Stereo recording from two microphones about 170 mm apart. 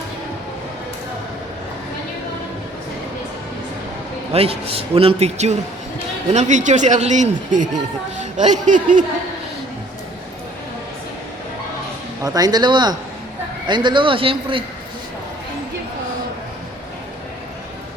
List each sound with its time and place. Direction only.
4.3 s a man's voice: 35° right (ahead or behind)
12.2 s speech: 20° right (ahead or behind)